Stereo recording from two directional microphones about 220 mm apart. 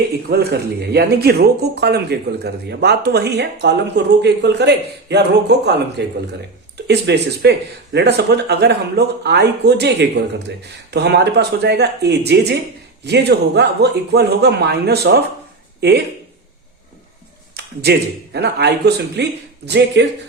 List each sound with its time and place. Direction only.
0.3 s speech: 45° right (ahead or behind)
18.3 s speech: 50° right (ahead or behind)